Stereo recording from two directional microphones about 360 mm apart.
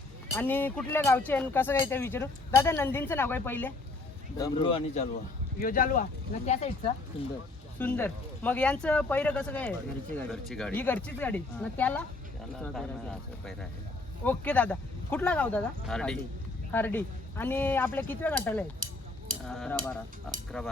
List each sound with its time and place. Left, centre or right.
0.3 s speech: centre